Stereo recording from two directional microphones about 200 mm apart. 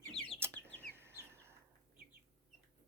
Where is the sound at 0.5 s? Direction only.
10° left (ahead or behind).